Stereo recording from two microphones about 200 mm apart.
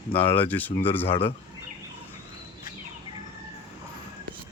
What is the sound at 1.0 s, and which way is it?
Speech, 30° left (ahead or behind).